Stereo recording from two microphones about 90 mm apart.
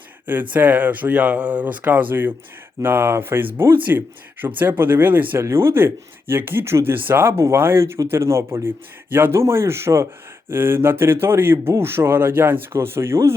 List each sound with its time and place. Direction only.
0.5 s speech: 15° right (ahead or behind)